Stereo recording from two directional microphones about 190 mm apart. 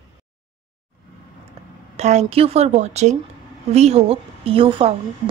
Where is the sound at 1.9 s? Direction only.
35° right (ahead or behind).